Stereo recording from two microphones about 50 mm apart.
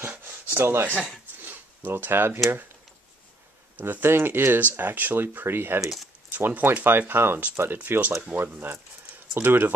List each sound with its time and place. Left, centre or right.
0.0 s speech: right
1.4 s a sound: right
3.7 s speech: right
5.8 s speech: centre
6.3 s speech: right